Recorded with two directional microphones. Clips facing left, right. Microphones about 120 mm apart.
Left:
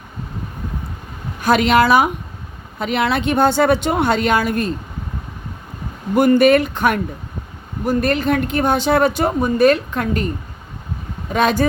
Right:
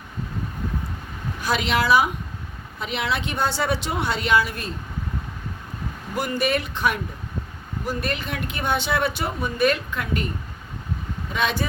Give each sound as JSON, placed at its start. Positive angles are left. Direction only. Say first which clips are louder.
{"t": 1.4, "sound": "speech", "louder": "left 9 dB", "side_deg": 55}
{"t": 6.1, "sound": "speech", "louder": "left 12 dB", "side_deg": 55}
{"t": 11.3, "sound": "speech", "louder": "left 8 dB", "side_deg": 45}